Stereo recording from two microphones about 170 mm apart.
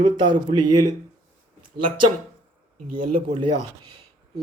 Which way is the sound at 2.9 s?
55° right (ahead or behind).